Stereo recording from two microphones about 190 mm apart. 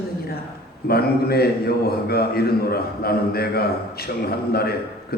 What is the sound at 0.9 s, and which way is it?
A man's voice, 55° left (ahead or behind).